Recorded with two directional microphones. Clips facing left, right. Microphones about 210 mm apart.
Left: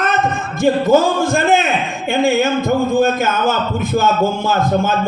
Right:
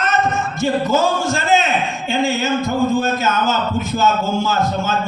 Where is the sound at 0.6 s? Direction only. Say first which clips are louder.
Left 5 dB; 55° left (ahead or behind).